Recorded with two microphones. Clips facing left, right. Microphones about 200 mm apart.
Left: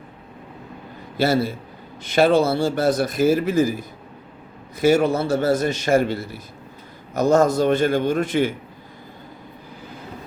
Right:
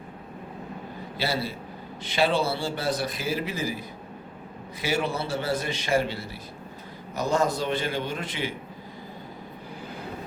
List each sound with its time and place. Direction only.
1.1 s a man's voice: 50° left (ahead or behind)